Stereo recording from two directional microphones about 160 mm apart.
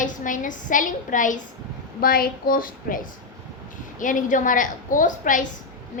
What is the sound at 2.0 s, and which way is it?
A woman's voice, 65° left (ahead or behind).